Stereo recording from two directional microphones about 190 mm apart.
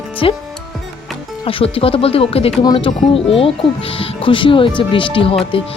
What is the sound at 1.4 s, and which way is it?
Speech, 30° left (ahead or behind).